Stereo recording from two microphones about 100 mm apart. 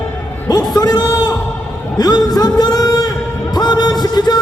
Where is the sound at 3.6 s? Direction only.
45° left (ahead or behind).